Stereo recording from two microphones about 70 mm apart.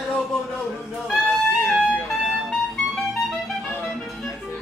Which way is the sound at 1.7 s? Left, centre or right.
Centre.